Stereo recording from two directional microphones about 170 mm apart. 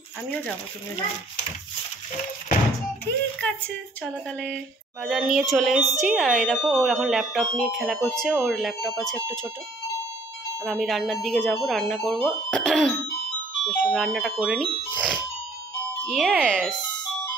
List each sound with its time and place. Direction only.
5.0 s speech: 5° right (ahead or behind)
10.6 s speech: centre (ahead or behind)
16.8 s music: 25° left (ahead or behind)